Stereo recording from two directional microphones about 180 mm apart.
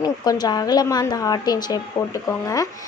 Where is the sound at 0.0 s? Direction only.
20° left (ahead or behind).